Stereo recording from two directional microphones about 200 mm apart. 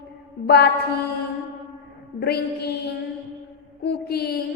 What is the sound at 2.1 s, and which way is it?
Speech, 55° left (ahead or behind).